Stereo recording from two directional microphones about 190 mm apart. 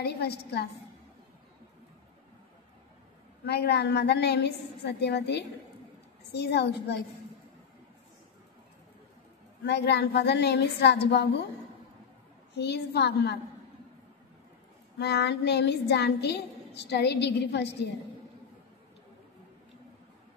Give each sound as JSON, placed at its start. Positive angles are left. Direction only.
{"t": 0.0, "sound": "a woman's voice", "side_deg": 60}
{"t": 3.4, "sound": "a woman's voice", "side_deg": 60}
{"t": 9.6, "sound": "a woman's voice", "side_deg": 60}
{"t": 12.5, "sound": "a woman's voice", "side_deg": 60}
{"t": 15.0, "sound": "a woman's voice", "side_deg": 60}